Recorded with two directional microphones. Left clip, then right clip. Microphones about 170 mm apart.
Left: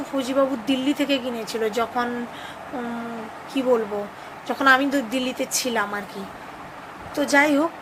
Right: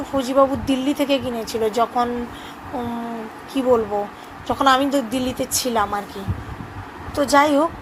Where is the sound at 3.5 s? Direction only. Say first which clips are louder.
Right 3 dB; centre (ahead or behind).